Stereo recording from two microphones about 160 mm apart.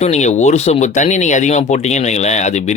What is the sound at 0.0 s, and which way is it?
Speech, 45° left (ahead or behind).